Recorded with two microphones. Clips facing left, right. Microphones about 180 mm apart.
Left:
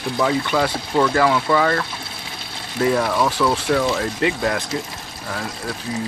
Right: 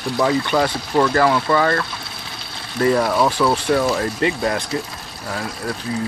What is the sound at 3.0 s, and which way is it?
Speech, 10° right (ahead or behind).